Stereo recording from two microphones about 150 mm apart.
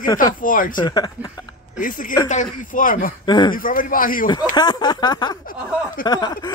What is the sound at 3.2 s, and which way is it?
Speech, 30° left (ahead or behind).